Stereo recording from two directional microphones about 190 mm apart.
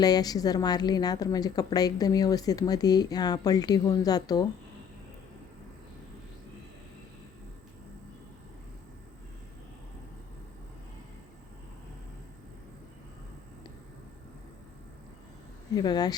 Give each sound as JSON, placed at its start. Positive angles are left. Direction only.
{"t": 0.0, "sound": "a woman's voice", "side_deg": 20}
{"t": 15.7, "sound": "a woman's voice", "side_deg": 20}